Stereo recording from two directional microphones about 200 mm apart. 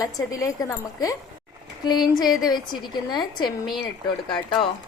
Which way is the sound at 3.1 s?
20° left (ahead or behind).